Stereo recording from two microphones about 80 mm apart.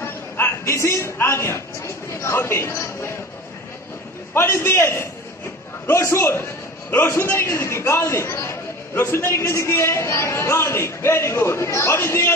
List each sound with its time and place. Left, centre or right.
0.0 s a sound: left
2.2 s a man's voice: left
4.3 s a man's voice: left